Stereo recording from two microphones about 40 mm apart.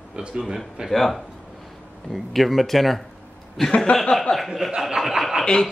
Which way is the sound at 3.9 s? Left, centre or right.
Left.